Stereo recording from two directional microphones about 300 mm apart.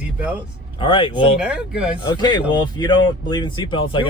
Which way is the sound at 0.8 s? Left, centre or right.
Centre.